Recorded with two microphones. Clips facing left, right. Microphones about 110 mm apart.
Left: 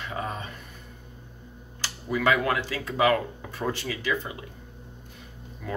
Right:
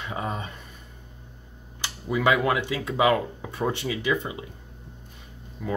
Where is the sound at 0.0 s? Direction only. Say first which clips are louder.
Right 2 dB; 20° right (ahead or behind).